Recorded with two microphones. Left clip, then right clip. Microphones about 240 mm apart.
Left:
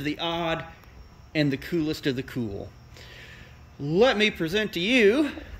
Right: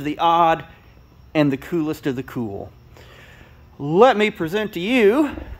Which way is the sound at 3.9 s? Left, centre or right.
Centre.